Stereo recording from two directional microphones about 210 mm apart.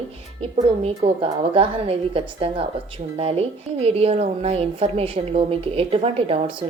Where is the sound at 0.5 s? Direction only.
30° right (ahead or behind).